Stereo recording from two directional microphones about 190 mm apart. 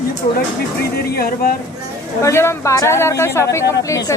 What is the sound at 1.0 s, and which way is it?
Speech, 55° left (ahead or behind).